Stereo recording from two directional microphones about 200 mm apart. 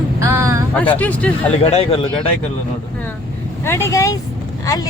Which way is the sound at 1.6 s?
30° left (ahead or behind).